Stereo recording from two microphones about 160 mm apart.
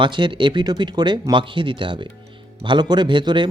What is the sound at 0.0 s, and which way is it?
Speech, 30° right (ahead or behind).